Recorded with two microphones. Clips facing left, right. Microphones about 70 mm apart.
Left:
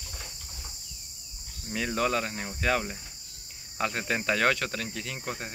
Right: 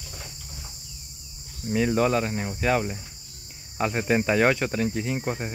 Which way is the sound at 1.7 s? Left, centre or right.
Centre.